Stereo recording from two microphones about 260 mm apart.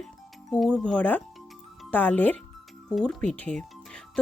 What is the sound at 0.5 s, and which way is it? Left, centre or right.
Speech, centre.